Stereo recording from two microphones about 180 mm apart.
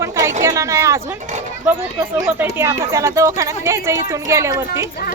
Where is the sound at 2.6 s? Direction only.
15° right (ahead or behind).